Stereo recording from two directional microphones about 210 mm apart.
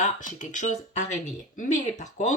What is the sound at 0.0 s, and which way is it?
Speech, 35° left (ahead or behind).